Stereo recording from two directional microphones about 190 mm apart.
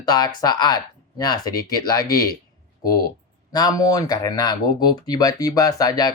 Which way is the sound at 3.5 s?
20° left (ahead or behind).